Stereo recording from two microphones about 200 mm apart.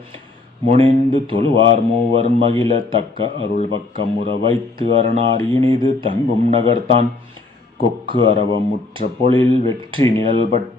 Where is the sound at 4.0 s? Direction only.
55° left (ahead or behind).